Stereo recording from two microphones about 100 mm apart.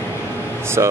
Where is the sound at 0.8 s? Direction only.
30° right (ahead or behind).